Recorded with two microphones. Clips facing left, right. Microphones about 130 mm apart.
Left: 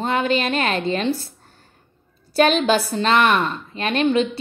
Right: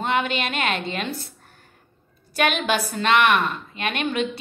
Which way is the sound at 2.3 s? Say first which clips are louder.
Left 6 dB; 30° left (ahead or behind).